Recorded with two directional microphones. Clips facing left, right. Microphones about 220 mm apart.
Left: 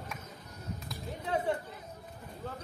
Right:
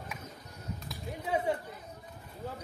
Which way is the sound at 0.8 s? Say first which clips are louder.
Right 1 dB; 10° right (ahead or behind).